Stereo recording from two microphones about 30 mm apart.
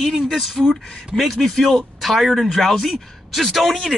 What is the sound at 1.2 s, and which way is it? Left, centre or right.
Speech, centre.